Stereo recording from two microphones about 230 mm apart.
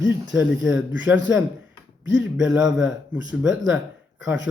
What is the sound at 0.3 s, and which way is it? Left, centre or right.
Speech, centre.